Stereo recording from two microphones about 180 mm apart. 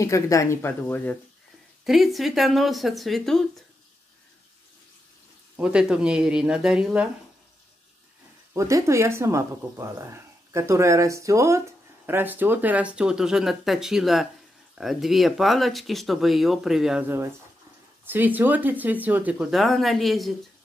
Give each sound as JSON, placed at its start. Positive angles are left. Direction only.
{"t": 0.0, "sound": "speech", "side_deg": 15}
{"t": 1.9, "sound": "speech", "side_deg": 0}
{"t": 5.6, "sound": "speech", "side_deg": -5}
{"t": 8.5, "sound": "speech", "side_deg": -15}
{"t": 18.0, "sound": "speech", "side_deg": -10}